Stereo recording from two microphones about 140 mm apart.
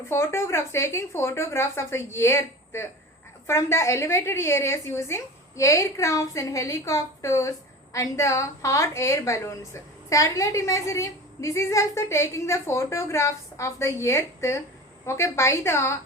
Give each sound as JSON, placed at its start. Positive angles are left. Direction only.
{"t": 0.1, "sound": "a woman's voice", "side_deg": 20}